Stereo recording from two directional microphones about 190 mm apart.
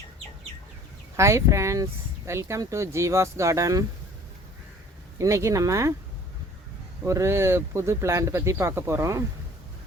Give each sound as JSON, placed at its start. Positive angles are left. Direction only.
{"t": 1.1, "sound": "speech", "side_deg": -15}
{"t": 5.1, "sound": "speech", "side_deg": -15}
{"t": 7.0, "sound": "speech", "side_deg": -15}